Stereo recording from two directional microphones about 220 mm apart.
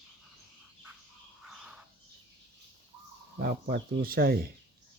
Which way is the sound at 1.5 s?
Centre (ahead or behind).